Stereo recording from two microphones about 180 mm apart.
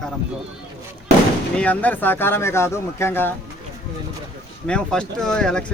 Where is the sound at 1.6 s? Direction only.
10° left (ahead or behind).